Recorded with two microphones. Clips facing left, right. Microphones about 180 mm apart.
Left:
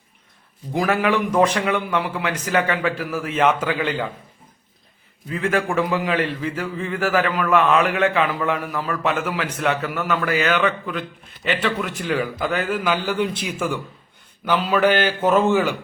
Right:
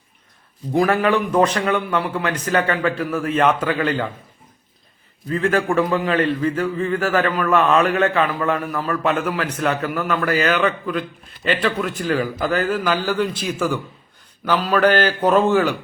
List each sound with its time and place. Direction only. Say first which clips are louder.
0.7 s a man's voice: right 4 dB; centre (ahead or behind)
1.0 s a man's voice: right 1 dB; 10° left (ahead or behind)
5.3 s a man's voice: right 3 dB; 10° left (ahead or behind)